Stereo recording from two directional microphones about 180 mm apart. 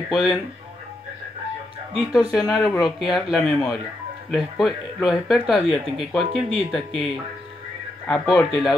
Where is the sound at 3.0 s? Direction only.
Centre (ahead or behind).